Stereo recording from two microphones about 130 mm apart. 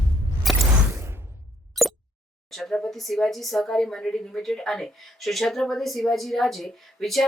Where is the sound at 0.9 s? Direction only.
20° right (ahead or behind).